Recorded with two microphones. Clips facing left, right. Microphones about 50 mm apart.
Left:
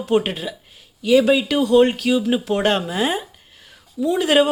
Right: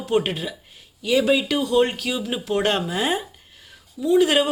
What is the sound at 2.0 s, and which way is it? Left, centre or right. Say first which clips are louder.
Speech: left 7 dB; centre.